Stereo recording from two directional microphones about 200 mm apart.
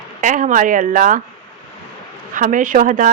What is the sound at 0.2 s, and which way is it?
Speech, 40° right (ahead or behind).